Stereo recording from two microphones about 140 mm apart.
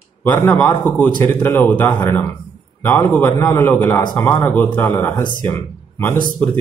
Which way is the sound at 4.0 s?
30° left (ahead or behind).